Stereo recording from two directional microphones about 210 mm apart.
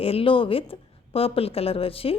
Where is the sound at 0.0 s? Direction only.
25° left (ahead or behind).